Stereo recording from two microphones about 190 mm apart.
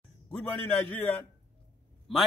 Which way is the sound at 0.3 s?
10° left (ahead or behind).